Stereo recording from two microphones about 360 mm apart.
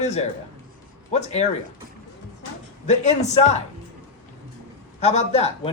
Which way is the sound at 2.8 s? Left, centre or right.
Centre.